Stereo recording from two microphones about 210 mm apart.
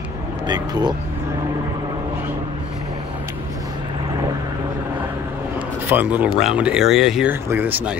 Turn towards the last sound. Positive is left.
turn(degrees=-10)  # may be behind; listen again after turning